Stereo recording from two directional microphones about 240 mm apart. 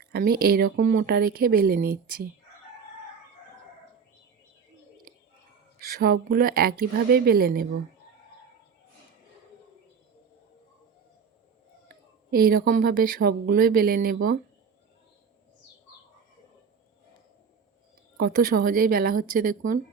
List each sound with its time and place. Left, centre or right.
0.0 s speech: right
5.8 s speech: right
12.3 s speech: right
18.2 s speech: right